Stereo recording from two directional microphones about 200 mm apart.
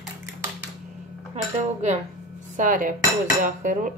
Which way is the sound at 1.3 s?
35° right (ahead or behind).